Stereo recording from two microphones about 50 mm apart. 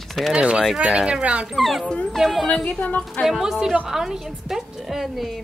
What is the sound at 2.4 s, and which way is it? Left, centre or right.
Speech, left.